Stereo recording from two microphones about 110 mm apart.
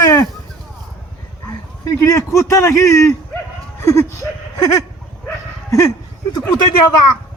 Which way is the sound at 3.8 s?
30° left (ahead or behind).